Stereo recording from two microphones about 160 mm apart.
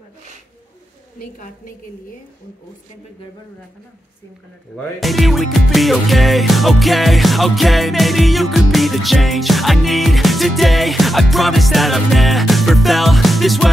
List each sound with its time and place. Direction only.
1.2 s a woman's voice: 60° left (ahead or behind)
5.0 s music: centre (ahead or behind)